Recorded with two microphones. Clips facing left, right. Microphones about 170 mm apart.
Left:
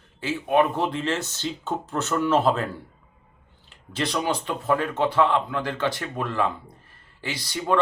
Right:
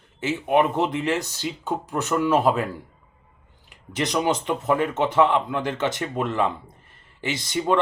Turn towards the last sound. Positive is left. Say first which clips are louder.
# right 2 dB
turn(degrees=-20)  # may be behind; listen again after turning